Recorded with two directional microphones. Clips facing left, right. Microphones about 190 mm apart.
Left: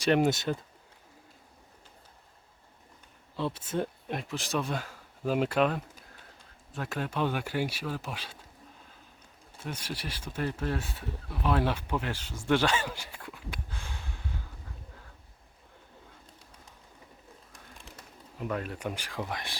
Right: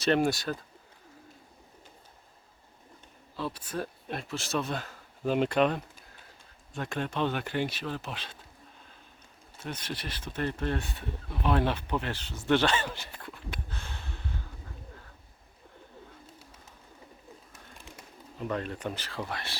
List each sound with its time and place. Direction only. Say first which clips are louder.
0.0 s speech: left 1 dB; 15° left (ahead or behind)
3.3 s speech: left 3 dB; 25° left (ahead or behind)
9.6 s speech: even; 10° left (ahead or behind)
17.5 s bird: right 1 dB; centre (ahead or behind)
18.3 s speech: right 1 dB; 5° left (ahead or behind)